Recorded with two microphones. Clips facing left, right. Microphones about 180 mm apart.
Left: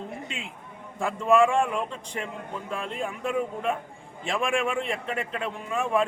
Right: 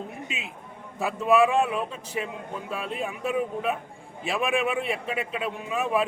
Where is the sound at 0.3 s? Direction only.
5° right (ahead or behind).